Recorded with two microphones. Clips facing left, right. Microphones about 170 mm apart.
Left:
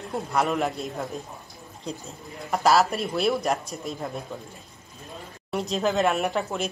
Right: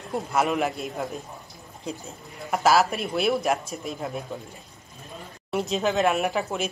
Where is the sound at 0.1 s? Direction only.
Centre (ahead or behind).